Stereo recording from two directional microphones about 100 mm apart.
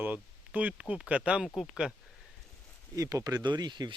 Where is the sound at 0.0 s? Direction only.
15° right (ahead or behind).